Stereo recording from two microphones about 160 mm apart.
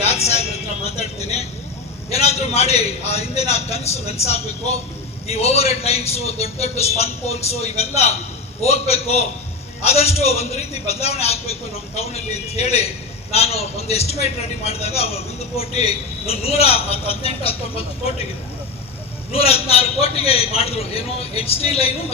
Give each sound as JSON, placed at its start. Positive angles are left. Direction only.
{"t": 0.0, "sound": "a sound", "side_deg": 40}
{"t": 0.9, "sound": "a man's voice", "side_deg": 40}
{"t": 19.3, "sound": "a man's voice", "side_deg": 40}